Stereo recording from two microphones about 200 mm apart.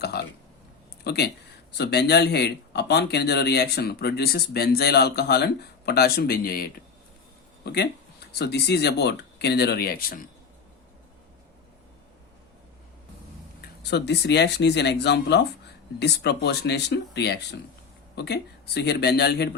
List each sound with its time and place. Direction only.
0.0 s a sound: 55° left (ahead or behind)
1.0 s speech: 55° left (ahead or behind)
13.8 s speech: 55° left (ahead or behind)